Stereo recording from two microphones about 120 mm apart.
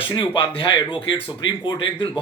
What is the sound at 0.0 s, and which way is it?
Speech, 45° left (ahead or behind).